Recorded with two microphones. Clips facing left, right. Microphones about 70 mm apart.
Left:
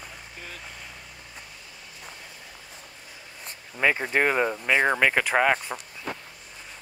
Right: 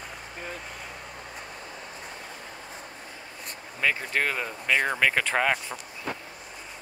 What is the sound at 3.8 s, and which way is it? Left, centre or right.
Speech, left.